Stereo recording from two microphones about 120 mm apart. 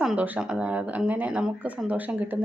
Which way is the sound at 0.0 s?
5° right (ahead or behind).